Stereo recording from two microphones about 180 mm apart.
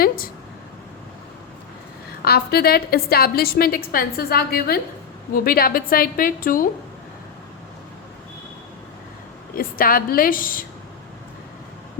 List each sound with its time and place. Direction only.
2.2 s a woman's voice: 60° left (ahead or behind)
9.6 s a woman's voice: 55° left (ahead or behind)